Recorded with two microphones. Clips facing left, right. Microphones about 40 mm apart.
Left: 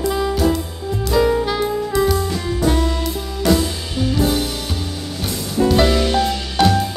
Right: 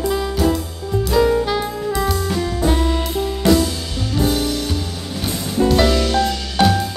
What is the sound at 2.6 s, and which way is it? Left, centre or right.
Music, centre.